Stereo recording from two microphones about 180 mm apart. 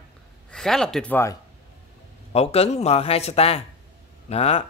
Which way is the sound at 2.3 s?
35° left (ahead or behind).